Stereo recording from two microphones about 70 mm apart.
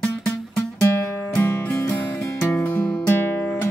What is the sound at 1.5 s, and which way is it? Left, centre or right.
Music, left.